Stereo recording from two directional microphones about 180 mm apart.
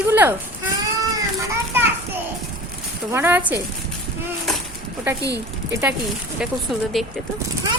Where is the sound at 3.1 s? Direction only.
10° right (ahead or behind).